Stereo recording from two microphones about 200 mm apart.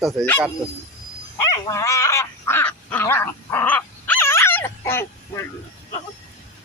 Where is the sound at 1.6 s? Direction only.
15° left (ahead or behind).